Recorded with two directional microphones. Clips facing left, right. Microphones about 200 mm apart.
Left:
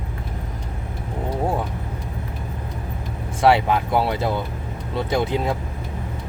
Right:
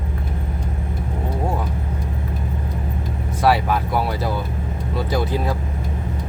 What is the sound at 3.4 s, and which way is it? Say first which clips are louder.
Speech: left 1 dB; 25° left (ahead or behind).